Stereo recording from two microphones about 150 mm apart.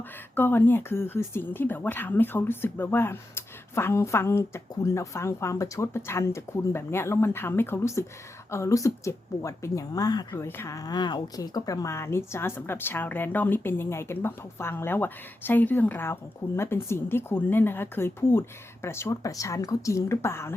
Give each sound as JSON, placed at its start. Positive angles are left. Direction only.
{"t": 0.3, "sound": "speech", "side_deg": 15}